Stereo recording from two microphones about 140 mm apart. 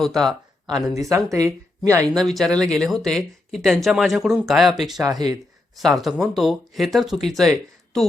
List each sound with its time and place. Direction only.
0.0 s speech: centre (ahead or behind)
0.9 s speech: 25° right (ahead or behind)
2.1 s speech: centre (ahead or behind)
5.0 s speech: 25° right (ahead or behind)
5.7 s speech: centre (ahead or behind)